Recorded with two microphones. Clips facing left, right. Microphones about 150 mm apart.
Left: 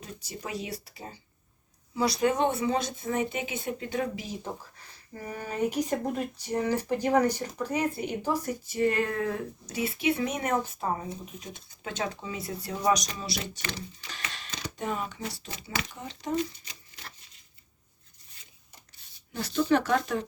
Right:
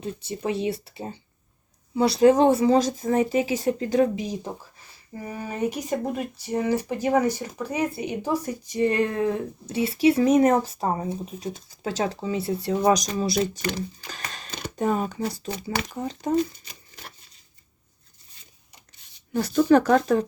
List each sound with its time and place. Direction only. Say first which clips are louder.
0.0 s speech: right 10 dB; 25° right (ahead or behind)
4.1 s speech: right 6 dB; 20° right (ahead or behind)
12.9 s speech: right 2 dB; 45° right (ahead or behind)
19.3 s speech: right 7 dB; 45° right (ahead or behind)